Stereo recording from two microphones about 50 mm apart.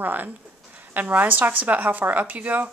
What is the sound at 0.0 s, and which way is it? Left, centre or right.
Speech, right.